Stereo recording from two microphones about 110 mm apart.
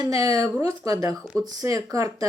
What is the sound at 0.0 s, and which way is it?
Speech, 35° right (ahead or behind).